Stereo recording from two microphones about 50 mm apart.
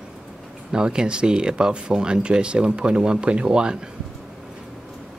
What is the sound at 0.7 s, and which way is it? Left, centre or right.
Speech, centre.